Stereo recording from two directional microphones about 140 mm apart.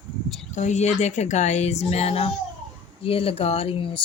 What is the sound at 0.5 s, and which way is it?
Speech, 55° left (ahead or behind).